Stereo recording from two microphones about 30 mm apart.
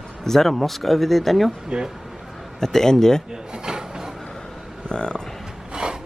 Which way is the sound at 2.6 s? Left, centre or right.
Centre.